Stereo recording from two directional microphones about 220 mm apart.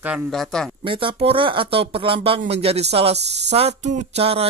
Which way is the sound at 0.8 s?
25° right (ahead or behind).